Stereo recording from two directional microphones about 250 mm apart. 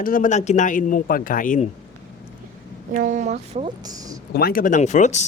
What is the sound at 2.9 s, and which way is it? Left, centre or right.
Speech, right.